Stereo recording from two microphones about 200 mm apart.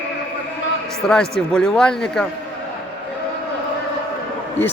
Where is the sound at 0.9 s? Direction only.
5° left (ahead or behind).